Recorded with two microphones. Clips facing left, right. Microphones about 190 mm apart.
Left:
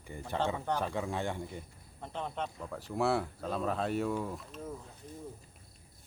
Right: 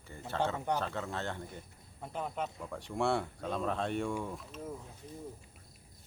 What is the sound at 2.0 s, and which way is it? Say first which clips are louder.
Speech: even; 5° right (ahead or behind).